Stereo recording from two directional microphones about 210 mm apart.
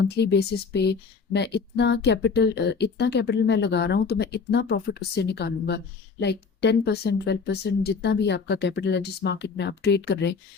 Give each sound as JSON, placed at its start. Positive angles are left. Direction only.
{"t": 0.0, "sound": "speech", "side_deg": 55}